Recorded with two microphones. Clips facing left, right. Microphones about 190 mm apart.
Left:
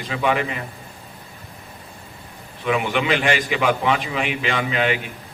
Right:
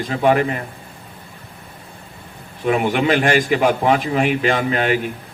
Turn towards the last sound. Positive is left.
turn(degrees=-45)  # may be behind; listen again after turning